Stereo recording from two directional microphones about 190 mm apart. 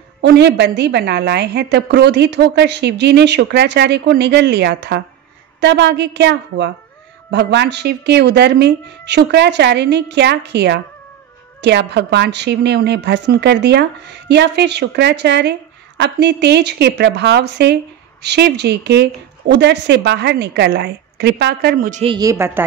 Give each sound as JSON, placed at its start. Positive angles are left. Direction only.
{"t": 0.2, "sound": "a woman's voice", "side_deg": -60}
{"t": 22.0, "sound": "a woman's voice", "side_deg": -20}